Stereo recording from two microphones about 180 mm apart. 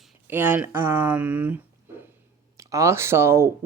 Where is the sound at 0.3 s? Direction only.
10° right (ahead or behind).